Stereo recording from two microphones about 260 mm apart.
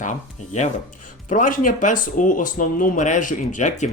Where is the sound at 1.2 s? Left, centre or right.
Left.